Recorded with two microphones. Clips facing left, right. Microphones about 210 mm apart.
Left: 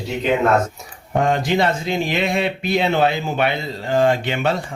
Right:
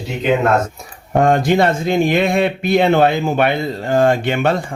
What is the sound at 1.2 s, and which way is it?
Speech, 50° right (ahead or behind).